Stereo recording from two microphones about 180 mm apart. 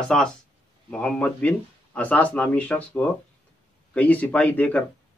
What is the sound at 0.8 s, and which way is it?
Speech, 5° left (ahead or behind).